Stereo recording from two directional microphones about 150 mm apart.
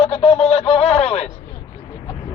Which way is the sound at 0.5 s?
45° left (ahead or behind).